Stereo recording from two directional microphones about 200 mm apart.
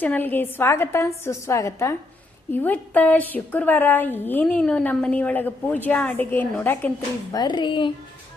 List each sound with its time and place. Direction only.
0.0 s a woman's voice: 10° left (ahead or behind)
7.3 s speech: 20° left (ahead or behind)